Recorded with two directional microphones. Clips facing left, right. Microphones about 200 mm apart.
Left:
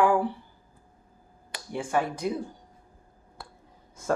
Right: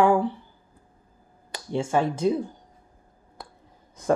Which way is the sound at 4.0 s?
20° right (ahead or behind).